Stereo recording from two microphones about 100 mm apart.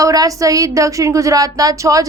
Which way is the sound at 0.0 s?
35° right (ahead or behind).